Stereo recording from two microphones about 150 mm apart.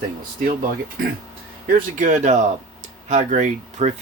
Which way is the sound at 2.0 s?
55° right (ahead or behind).